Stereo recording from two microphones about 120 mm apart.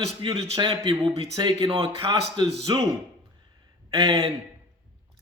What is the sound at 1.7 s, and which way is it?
A man's voice, 50° right (ahead or behind).